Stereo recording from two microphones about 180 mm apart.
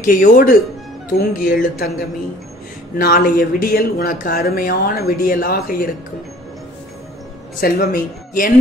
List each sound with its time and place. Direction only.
0.0 s speech: 45° left (ahead or behind)
3.0 s speech: 60° left (ahead or behind)
7.6 s speech: 55° left (ahead or behind)